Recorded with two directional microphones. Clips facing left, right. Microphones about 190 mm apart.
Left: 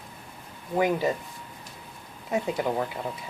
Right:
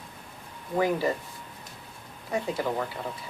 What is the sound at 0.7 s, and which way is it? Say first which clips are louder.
Speech: left 1 dB; 20° left (ahead or behind).